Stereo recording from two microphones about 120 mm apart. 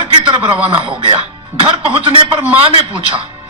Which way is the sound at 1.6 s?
50° right (ahead or behind).